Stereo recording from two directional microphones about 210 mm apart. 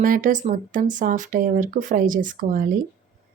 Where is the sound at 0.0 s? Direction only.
40° right (ahead or behind).